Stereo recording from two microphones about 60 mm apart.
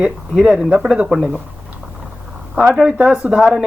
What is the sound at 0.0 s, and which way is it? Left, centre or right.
Speech, centre.